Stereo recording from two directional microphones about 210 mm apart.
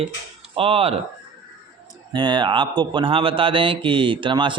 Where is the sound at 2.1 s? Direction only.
20° right (ahead or behind).